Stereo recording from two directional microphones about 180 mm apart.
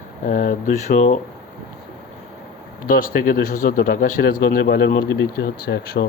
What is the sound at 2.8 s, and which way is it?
Speech, 55° left (ahead or behind).